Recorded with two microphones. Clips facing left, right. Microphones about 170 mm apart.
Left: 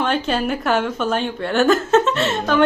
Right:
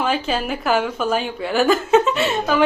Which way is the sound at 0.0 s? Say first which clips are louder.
Left 1 dB; 5° right (ahead or behind).